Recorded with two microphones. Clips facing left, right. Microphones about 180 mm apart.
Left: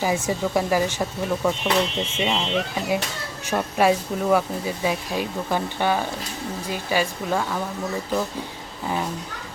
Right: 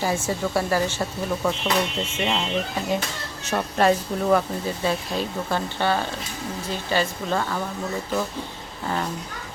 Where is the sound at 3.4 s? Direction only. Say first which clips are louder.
Left 1 dB; 10° left (ahead or behind).